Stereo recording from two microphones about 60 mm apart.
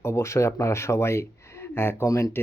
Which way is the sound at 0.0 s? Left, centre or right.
Left.